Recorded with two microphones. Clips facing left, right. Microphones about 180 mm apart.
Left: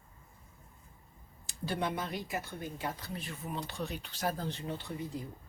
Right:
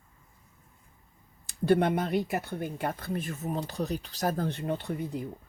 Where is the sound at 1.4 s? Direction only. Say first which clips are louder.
Right 11 dB; 55° right (ahead or behind).